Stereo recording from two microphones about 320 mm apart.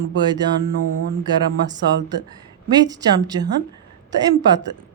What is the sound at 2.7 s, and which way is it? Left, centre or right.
Speech, centre.